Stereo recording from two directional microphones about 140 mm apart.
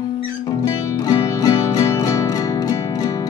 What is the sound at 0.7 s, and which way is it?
Music, 25° left (ahead or behind).